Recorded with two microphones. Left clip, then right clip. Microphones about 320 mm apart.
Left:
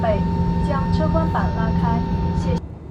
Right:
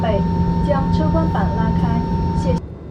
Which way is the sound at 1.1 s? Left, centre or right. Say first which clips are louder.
Right 2 dB; left.